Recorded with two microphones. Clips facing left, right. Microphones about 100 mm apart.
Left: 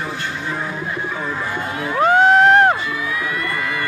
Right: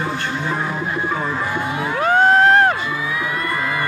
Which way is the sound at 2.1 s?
20° left (ahead or behind).